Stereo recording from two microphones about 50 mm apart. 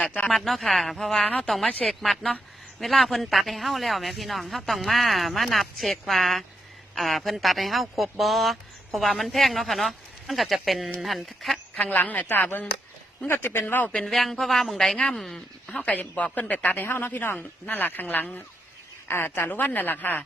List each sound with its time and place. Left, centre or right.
0.3 s speech: centre
11.8 s a woman's voice: left
13.9 s speech: centre; by 16.0 s left
16.0 s a woman's voice: left